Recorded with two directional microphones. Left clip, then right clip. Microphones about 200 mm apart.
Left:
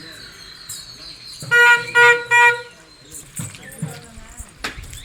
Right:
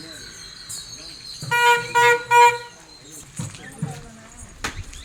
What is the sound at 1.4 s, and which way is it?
Car alarm, 15° right (ahead or behind).